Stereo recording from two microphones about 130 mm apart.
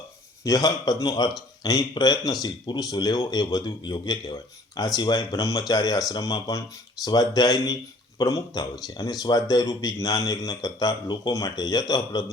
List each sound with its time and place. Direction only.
0.4 s a man's voice: 30° left (ahead or behind)